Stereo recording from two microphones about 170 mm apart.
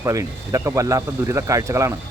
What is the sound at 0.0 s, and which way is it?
A man's voice, 20° right (ahead or behind).